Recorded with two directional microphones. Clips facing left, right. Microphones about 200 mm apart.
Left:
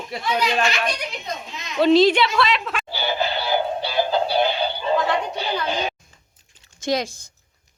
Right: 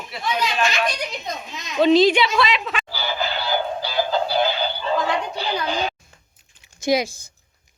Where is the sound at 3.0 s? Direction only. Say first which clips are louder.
Left 4 dB; 25° left (ahead or behind).